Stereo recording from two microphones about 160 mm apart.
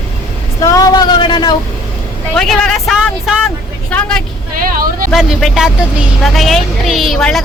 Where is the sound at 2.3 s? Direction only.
5° left (ahead or behind).